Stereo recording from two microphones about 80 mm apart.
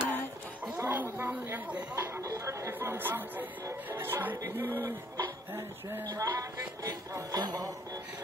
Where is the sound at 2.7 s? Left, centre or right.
Right.